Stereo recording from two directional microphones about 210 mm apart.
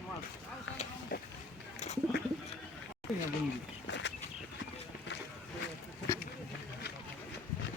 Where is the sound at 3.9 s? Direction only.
60° left (ahead or behind).